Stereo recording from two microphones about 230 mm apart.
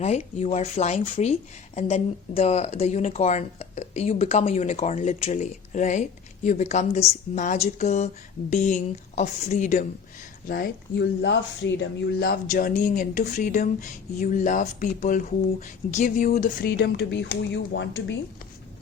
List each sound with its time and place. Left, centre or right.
0.0 s speech: left
10.5 s speech: left